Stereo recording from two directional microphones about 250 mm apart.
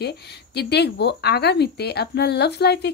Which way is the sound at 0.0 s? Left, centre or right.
Left.